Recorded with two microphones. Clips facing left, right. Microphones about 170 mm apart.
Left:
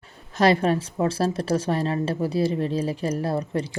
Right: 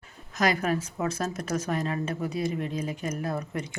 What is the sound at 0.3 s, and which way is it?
A woman's voice, 30° left (ahead or behind).